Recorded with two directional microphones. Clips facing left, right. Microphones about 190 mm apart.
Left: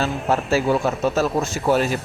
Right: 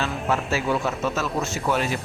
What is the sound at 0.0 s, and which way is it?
Speech, 40° left (ahead or behind).